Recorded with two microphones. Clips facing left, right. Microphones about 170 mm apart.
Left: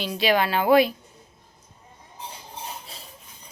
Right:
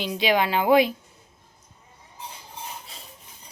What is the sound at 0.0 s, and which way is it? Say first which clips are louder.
Speech: even; 20° right (ahead or behind).